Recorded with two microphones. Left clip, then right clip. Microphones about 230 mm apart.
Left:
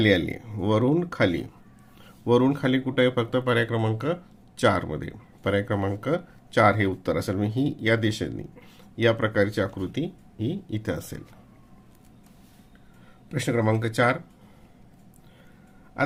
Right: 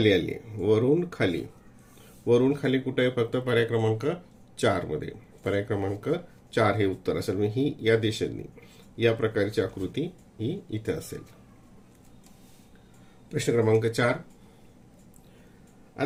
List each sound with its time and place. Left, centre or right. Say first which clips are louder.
0.0 s speech: left 1 dB; left
13.3 s speech: right 2 dB; left